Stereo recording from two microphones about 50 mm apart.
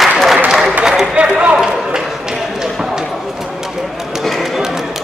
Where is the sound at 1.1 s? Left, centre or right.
Right.